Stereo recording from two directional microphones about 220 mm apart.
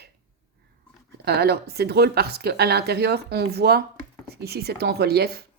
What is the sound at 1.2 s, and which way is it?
Speech, 45° right (ahead or behind).